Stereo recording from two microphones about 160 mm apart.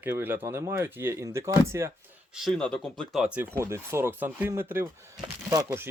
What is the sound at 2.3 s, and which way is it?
Speech, centre (ahead or behind).